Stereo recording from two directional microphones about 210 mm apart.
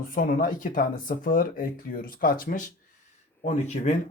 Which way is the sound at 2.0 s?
45° left (ahead or behind).